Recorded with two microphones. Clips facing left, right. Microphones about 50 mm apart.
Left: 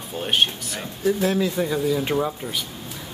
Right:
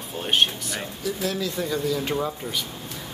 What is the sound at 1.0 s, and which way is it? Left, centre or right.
Speech, left.